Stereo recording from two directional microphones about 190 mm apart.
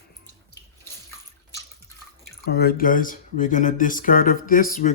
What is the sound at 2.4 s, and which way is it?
Speech, 55° left (ahead or behind).